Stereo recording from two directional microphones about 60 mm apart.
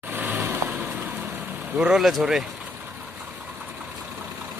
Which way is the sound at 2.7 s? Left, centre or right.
Right.